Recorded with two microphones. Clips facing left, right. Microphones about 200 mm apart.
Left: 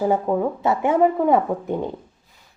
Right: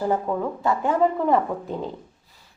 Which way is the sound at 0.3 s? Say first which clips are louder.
Left 4 dB; 25° left (ahead or behind).